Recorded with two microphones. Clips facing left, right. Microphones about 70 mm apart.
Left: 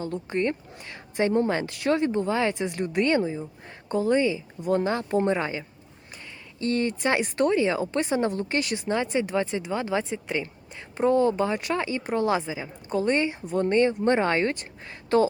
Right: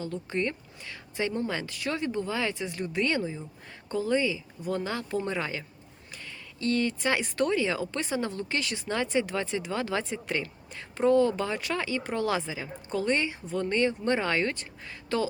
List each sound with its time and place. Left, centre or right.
0.0 s a woman's voice: left
8.9 s a woman's voice: centre
10.9 s a woman's voice: left